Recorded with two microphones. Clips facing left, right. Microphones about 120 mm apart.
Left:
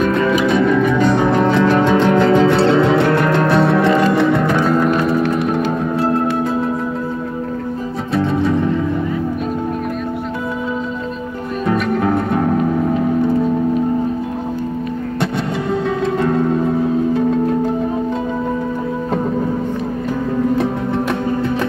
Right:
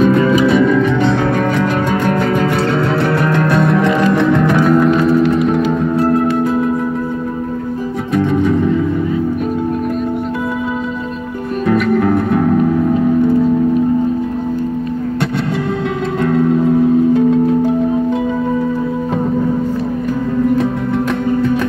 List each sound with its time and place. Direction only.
0.5 s music: centre (ahead or behind)
1.1 s music: 15° left (ahead or behind)
2.1 s music: 10° right (ahead or behind)
2.7 s music: 15° left (ahead or behind)
4.5 s music: 10° right (ahead or behind)
4.8 s music: centre (ahead or behind)
11.6 s music: 10° left (ahead or behind)